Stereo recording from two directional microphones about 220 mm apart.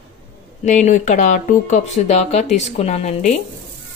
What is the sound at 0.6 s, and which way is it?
Speech, 35° left (ahead or behind).